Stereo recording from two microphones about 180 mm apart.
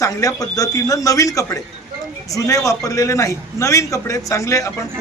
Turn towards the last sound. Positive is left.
turn(degrees=15)  # may be behind; listen again after turning